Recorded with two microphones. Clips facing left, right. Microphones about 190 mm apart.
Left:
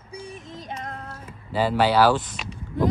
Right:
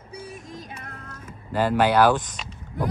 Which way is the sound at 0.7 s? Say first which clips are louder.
Left 6 dB; 55° right (ahead or behind).